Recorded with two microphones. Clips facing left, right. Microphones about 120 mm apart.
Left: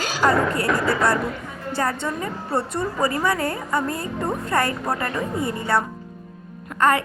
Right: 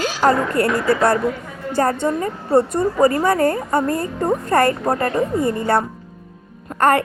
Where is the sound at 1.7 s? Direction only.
45° right (ahead or behind).